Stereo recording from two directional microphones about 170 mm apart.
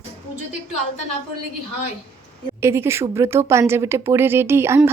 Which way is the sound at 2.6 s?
15° right (ahead or behind).